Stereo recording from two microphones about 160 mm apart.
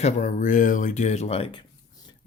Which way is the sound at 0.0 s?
50° left (ahead or behind).